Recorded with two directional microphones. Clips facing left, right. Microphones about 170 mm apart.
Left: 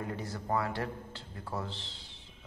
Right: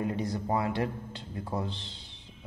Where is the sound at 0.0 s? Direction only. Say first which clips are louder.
Right 7 dB; 20° right (ahead or behind).